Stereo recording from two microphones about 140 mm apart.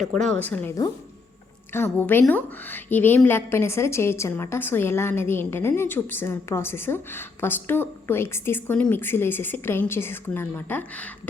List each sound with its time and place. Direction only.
0.0 s a woman's voice: 5° left (ahead or behind)
1.7 s a woman's voice: 15° left (ahead or behind)